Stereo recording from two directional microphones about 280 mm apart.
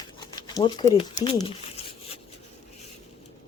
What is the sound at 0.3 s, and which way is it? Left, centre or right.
Speech, centre.